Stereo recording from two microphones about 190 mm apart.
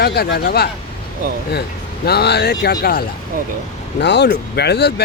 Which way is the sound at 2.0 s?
60° left (ahead or behind).